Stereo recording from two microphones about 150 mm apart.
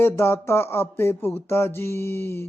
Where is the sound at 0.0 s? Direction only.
15° left (ahead or behind).